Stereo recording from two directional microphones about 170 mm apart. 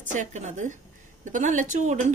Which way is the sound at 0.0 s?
45° right (ahead or behind).